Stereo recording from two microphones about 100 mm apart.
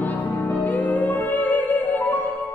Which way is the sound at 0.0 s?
20° left (ahead or behind).